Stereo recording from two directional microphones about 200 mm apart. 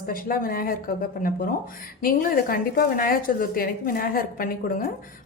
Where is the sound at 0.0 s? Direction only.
45° left (ahead or behind).